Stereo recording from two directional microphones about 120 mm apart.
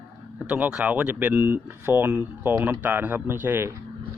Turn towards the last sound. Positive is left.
turn(degrees=-15)  # may be behind; listen again after turning